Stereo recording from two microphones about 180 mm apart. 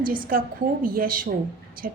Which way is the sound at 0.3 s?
50° right (ahead or behind).